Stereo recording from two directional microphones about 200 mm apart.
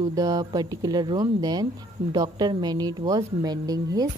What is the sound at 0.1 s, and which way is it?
A woman's voice, 20° right (ahead or behind).